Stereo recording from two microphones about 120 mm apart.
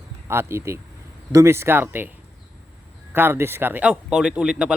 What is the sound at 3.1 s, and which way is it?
Speech, 20° right (ahead or behind).